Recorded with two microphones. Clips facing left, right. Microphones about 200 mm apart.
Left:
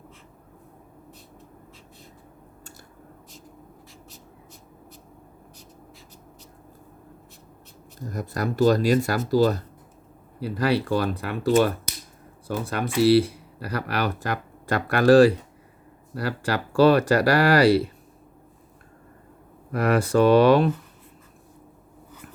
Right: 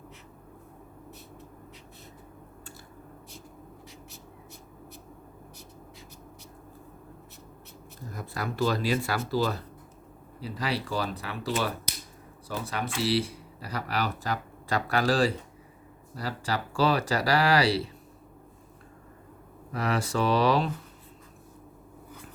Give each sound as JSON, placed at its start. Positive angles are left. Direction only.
{"t": 8.1, "sound": "speech", "side_deg": 45}
{"t": 10.4, "sound": "speech", "side_deg": 60}
{"t": 19.7, "sound": "speech", "side_deg": 55}